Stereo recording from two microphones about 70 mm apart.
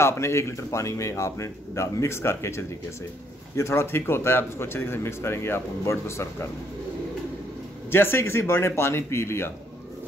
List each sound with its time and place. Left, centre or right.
0.0 s speech: left
7.9 s speech: left